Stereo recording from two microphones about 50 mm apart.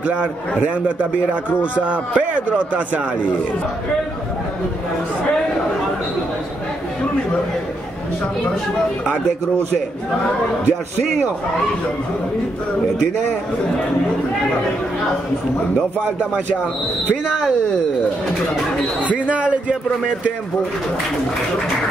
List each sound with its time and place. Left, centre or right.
0.0 s a man's voice: right
19.2 s a man's voice: right